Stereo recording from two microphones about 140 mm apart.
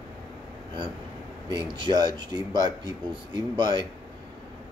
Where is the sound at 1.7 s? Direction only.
30° right (ahead or behind).